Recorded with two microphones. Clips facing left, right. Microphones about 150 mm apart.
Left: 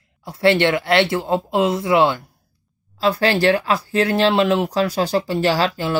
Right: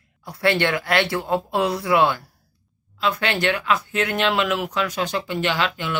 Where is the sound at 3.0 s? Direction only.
35° left (ahead or behind).